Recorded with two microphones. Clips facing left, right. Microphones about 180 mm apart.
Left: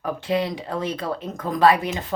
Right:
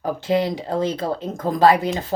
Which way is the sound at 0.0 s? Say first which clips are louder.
Right 3 dB; 30° right (ahead or behind).